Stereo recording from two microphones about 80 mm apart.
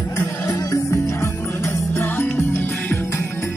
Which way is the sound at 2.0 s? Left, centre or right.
Left.